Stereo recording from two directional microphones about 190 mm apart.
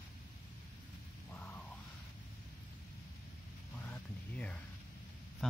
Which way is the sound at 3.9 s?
5° left (ahead or behind).